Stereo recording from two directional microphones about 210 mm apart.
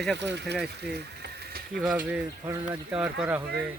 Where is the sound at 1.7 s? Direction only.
Centre (ahead or behind).